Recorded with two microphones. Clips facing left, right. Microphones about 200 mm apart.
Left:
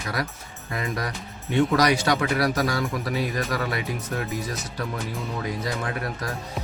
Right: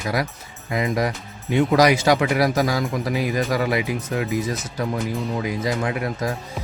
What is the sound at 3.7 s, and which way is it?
Speech, 15° right (ahead or behind).